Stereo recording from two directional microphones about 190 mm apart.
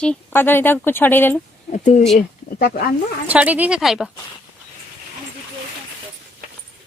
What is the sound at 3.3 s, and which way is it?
Speech, 10° right (ahead or behind).